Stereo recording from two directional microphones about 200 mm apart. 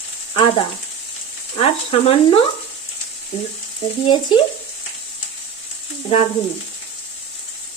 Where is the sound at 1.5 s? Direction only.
30° left (ahead or behind).